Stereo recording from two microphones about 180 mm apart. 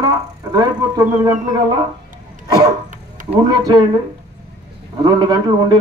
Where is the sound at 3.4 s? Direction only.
25° right (ahead or behind).